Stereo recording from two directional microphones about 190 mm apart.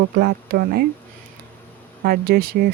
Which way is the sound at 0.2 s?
55° right (ahead or behind).